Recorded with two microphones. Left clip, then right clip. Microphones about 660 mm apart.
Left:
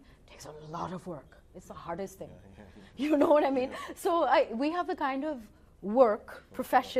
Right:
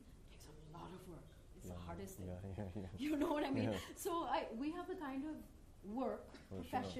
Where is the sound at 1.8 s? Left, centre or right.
Left.